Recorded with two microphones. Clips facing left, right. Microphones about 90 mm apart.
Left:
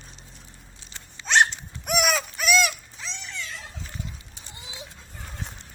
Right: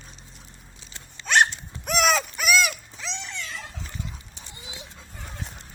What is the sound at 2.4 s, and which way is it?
Dog, 5° right (ahead or behind).